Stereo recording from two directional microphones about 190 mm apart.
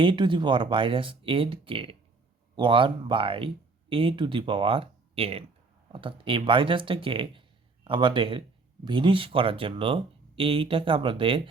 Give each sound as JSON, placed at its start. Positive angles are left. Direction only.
{"t": 0.0, "sound": "speech", "side_deg": -25}